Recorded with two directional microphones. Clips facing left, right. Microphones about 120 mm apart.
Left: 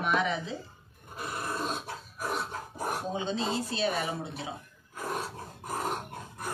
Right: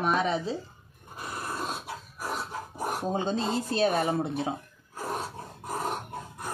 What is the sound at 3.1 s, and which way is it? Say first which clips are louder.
Speech: right 5 dB; 45° right (ahead or behind).